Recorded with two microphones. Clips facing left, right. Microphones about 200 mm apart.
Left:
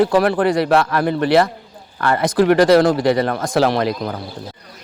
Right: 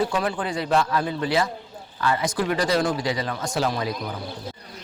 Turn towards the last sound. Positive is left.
turn(degrees=70)  # may be behind; listen again after turning